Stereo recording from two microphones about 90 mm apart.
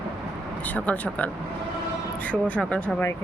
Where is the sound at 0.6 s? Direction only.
15° left (ahead or behind).